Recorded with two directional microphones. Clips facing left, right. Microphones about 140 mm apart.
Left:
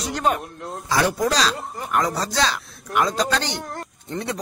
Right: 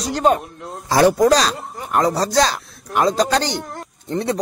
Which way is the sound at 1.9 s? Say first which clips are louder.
Right 6 dB; 35° right (ahead or behind).